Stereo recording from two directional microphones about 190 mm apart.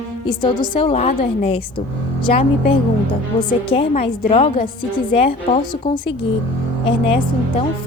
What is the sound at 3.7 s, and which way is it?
A woman's voice, 30° left (ahead or behind).